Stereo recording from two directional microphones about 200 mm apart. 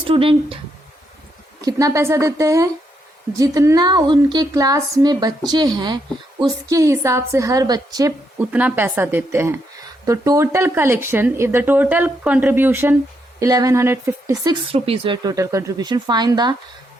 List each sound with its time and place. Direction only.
0.1 s speech: 30° right (ahead or behind)
1.6 s speech: 15° right (ahead or behind)
8.4 s speech: 10° right (ahead or behind)
14.7 s speech: 25° right (ahead or behind)